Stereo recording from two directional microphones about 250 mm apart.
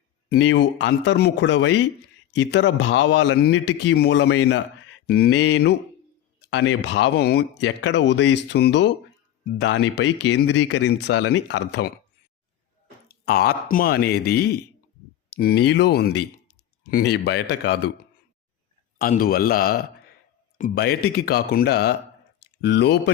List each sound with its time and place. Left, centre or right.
0.3 s speech: left
13.2 s speech: left
18.9 s speech: left